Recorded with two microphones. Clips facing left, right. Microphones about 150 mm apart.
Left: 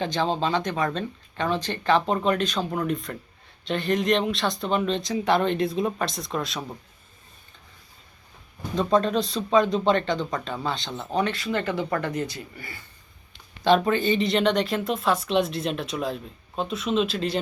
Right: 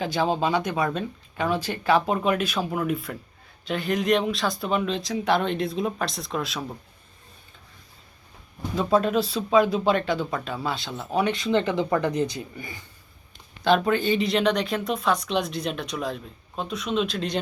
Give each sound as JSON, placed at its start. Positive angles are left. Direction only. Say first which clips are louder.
{"t": 0.0, "sound": "speech", "louder": "right 1 dB", "side_deg": -10}
{"t": 8.7, "sound": "speech", "louder": "even", "side_deg": -5}
{"t": 11.3, "sound": "speech", "louder": "right 4 dB", "side_deg": -20}
{"t": 13.7, "sound": "speech", "louder": "left 1 dB", "side_deg": 0}